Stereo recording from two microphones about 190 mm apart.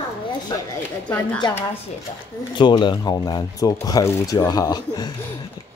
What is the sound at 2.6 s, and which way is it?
Speech, 25° left (ahead or behind).